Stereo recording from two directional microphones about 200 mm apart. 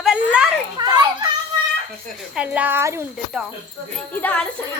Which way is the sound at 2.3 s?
5° right (ahead or behind).